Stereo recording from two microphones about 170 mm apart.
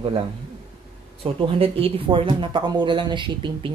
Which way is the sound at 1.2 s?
35° right (ahead or behind).